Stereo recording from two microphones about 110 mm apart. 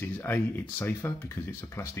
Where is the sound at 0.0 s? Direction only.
20° left (ahead or behind).